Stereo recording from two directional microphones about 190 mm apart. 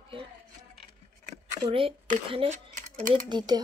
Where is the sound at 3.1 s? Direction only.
25° right (ahead or behind).